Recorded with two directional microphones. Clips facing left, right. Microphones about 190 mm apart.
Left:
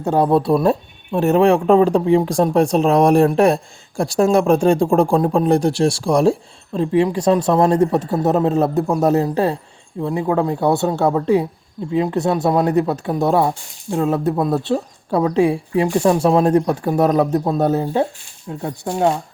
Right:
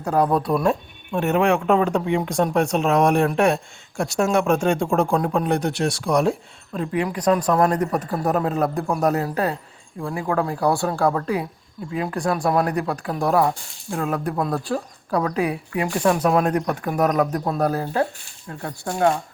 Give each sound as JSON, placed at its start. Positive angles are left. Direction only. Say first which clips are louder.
{"t": 0.0, "sound": "speech", "louder": "left 4 dB", "side_deg": 25}
{"t": 18.4, "sound": "speech", "louder": "left 5 dB", "side_deg": 15}